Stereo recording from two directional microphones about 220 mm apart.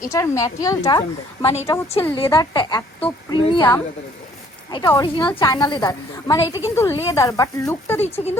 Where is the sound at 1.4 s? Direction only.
30° left (ahead or behind).